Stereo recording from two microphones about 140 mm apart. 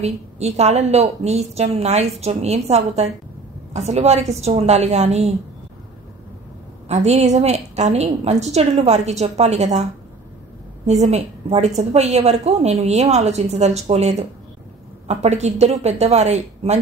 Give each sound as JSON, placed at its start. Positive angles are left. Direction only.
{"t": 0.0, "sound": "a woman's voice", "side_deg": -50}
{"t": 6.9, "sound": "a woman's voice", "side_deg": -50}
{"t": 10.9, "sound": "a woman's voice", "side_deg": -50}